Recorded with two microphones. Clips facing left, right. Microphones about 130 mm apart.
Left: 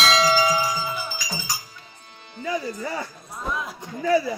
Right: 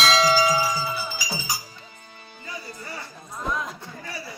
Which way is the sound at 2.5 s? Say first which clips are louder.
Left 12 dB; 90° left.